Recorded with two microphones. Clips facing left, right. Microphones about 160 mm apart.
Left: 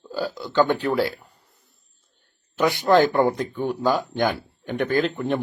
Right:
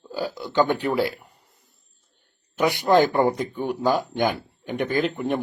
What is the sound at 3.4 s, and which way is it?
Speech, 15° right (ahead or behind).